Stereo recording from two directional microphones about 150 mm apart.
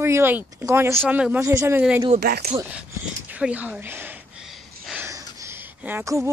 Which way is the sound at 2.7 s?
10° right (ahead or behind).